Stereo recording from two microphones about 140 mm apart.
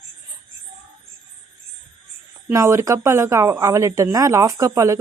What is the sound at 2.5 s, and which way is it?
Speech, 20° right (ahead or behind).